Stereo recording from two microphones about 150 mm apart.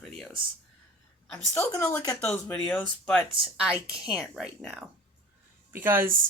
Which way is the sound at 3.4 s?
5° right (ahead or behind).